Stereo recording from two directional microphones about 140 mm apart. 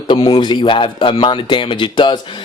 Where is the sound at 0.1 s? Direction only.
35° left (ahead or behind).